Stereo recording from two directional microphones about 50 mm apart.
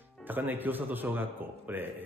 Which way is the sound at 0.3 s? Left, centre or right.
Right.